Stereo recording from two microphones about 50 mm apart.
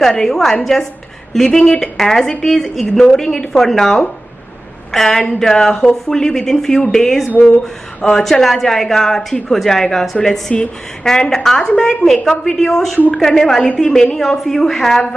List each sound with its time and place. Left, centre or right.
0.0 s a woman's voice: centre
10.5 s a woman's voice: centre